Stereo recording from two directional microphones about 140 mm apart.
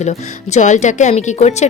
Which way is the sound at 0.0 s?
55° left (ahead or behind).